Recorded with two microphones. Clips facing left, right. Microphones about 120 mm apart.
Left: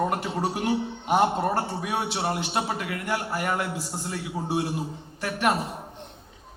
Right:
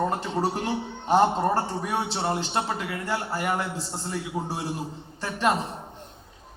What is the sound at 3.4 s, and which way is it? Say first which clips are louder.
Speech: right 2 dB; centre (ahead or behind).